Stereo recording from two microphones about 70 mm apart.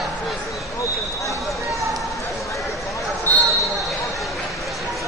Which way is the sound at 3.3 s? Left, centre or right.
Left.